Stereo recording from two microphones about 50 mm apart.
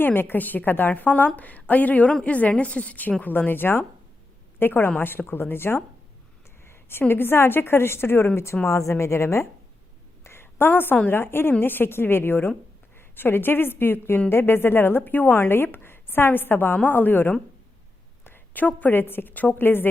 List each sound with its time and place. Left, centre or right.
0.0 s a woman's voice: left
6.7 s a sound: left
7.1 s a woman's voice: left
8.6 s a woman's voice: left
10.2 s a sound: left
11.1 s a woman's voice: left
18.3 s a sound: left
18.9 s a woman's voice: left
19.3 s a woman's voice: left